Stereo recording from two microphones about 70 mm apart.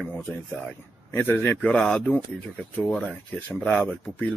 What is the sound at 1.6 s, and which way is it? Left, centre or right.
Speech, centre.